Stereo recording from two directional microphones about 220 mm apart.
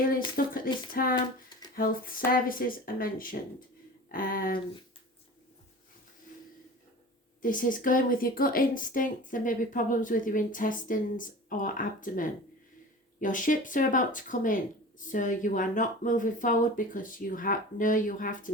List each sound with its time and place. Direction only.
0.3 s speech: 40° left (ahead or behind)
7.4 s speech: 40° left (ahead or behind)